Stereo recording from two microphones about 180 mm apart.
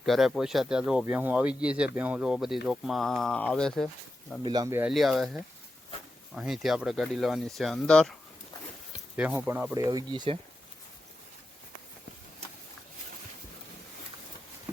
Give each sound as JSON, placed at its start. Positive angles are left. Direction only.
{"t": 0.0, "sound": "speech", "side_deg": 0}
{"t": 4.4, "sound": "speech", "side_deg": -20}
{"t": 4.8, "sound": "speech", "side_deg": 0}
{"t": 9.1, "sound": "speech", "side_deg": -10}